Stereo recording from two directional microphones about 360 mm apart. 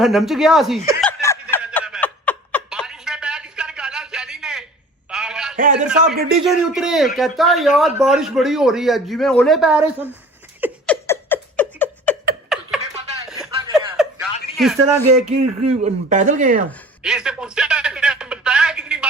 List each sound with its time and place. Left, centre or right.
0.0 s a man's voice: centre
1.0 s snicker: centre
5.1 s a sound: centre
5.5 s speech: right
6.3 s a man's voice: centre
10.6 s a sound: centre
13.4 s chuckle: centre
15.3 s speech: centre
17.0 s a sound: centre